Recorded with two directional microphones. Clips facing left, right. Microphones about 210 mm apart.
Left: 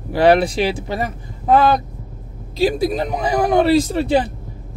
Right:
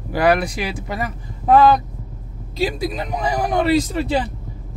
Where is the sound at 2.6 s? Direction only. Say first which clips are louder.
Left 6 dB; 30° left (ahead or behind).